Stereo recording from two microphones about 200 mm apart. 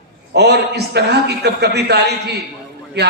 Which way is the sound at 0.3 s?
55° right (ahead or behind).